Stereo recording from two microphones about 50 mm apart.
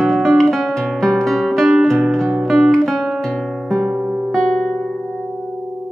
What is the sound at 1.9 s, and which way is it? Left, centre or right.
Guitar, centre.